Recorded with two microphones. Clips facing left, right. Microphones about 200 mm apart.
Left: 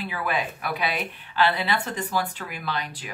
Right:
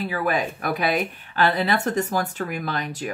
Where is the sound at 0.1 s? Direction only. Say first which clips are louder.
Right 2 dB; 45° right (ahead or behind).